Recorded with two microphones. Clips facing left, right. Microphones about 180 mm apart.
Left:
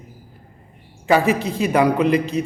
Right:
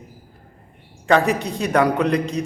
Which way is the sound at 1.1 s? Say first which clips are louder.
Left 1 dB; 5° left (ahead or behind).